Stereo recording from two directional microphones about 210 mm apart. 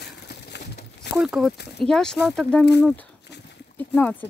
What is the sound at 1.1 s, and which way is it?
Speech, centre (ahead or behind).